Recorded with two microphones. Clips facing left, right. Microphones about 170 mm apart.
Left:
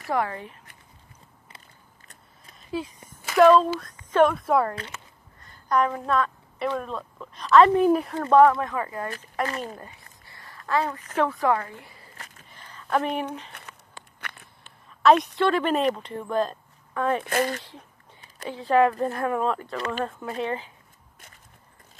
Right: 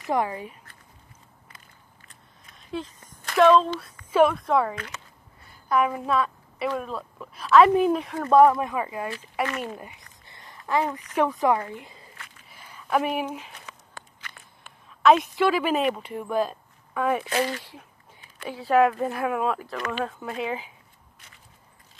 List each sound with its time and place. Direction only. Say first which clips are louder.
0.1 s speech: right 1 dB; 15° right (ahead or behind)
2.5 s a sound: left 2 dB; 5° left (ahead or behind)
4.1 s a woman's voice: even; 5° right (ahead or behind)
9.4 s speech: right 1 dB; 35° left (ahead or behind)
9.8 s a sound: right 1 dB; 15° right (ahead or behind)
11.1 s a woman's voice: right 1 dB; 15° right (ahead or behind)
12.4 s a sound: right 1 dB; 10° right (ahead or behind)
15.0 s speech: even; 5° right (ahead or behind)
17.2 s speech: left 1 dB; 50° left (ahead or behind)
18.5 s speech: even; 10° right (ahead or behind)